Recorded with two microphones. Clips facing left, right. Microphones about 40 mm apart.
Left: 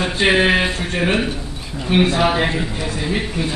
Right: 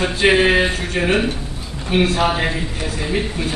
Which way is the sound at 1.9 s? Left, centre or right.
Left.